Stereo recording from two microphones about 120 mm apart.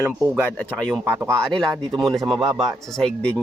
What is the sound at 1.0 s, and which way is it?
Speech, 20° right (ahead or behind).